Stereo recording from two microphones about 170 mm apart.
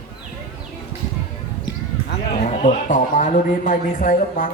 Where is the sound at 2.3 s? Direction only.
40° left (ahead or behind).